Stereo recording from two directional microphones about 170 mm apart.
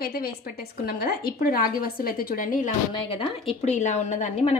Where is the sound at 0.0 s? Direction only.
60° left (ahead or behind).